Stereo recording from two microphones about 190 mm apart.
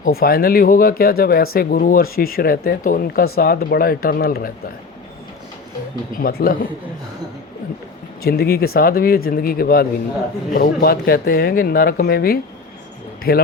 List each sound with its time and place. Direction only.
0.0 s speech: 50° left (ahead or behind)
6.1 s speech: 50° left (ahead or behind)
8.2 s speech: 55° left (ahead or behind)